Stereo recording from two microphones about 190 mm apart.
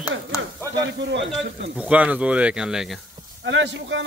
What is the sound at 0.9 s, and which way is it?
Speech, 70° right (ahead or behind).